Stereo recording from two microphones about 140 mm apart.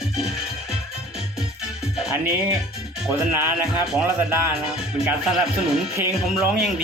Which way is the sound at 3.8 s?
5° right (ahead or behind).